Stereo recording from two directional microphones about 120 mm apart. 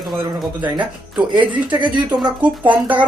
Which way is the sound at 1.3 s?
40° right (ahead or behind).